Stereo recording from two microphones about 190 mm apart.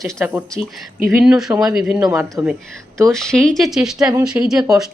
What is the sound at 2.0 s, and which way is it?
Speech, 20° right (ahead or behind).